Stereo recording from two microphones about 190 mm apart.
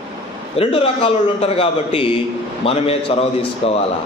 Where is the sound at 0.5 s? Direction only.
30° left (ahead or behind).